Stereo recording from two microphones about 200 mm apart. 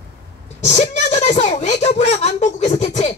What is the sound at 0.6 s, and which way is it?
A woman's voice, 35° left (ahead or behind).